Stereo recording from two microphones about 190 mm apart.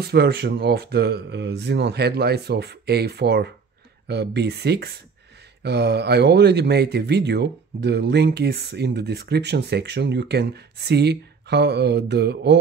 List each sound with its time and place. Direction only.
0.0 s speech: 55° right (ahead or behind)